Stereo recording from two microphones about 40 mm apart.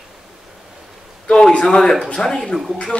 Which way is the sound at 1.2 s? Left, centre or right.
Left.